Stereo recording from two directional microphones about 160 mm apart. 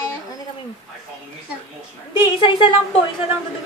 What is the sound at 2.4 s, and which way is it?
Speech, 35° left (ahead or behind).